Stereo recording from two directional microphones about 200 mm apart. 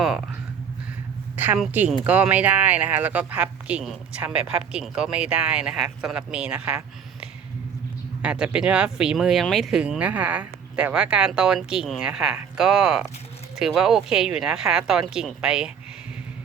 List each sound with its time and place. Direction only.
1.4 s speech: 5° right (ahead or behind)